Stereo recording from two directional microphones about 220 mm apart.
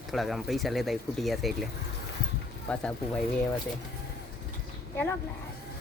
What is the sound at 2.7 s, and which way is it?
Speech, 5° left (ahead or behind).